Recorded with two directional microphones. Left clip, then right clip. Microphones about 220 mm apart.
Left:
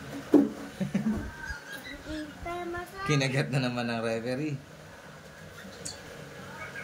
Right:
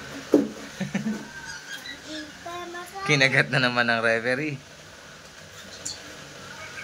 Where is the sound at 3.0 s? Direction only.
5° left (ahead or behind).